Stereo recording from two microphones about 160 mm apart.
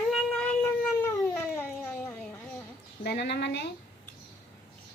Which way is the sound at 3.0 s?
90° left.